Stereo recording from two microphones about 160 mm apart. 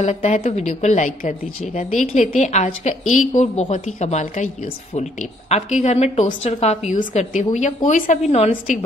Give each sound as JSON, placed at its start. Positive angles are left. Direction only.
{"t": 0.0, "sound": "a woman's voice", "side_deg": 45}
{"t": 6.9, "sound": "a woman's voice", "side_deg": 50}